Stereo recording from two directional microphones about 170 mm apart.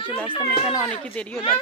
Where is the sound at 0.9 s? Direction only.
10° left (ahead or behind).